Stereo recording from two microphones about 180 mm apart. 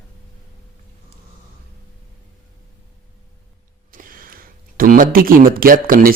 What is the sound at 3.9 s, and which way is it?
Speech, 50° right (ahead or behind).